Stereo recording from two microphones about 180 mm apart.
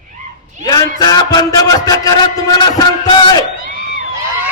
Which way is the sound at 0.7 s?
20° left (ahead or behind).